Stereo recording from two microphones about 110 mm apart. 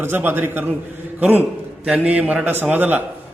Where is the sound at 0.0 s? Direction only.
20° right (ahead or behind).